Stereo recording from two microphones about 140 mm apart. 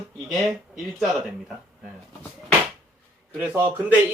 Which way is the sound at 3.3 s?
15° right (ahead or behind).